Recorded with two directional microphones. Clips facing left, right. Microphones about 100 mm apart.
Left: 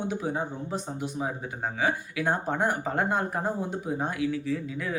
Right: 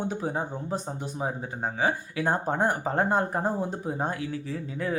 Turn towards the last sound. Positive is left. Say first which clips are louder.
# even
turn(degrees=-35)  # may be behind; listen again after turning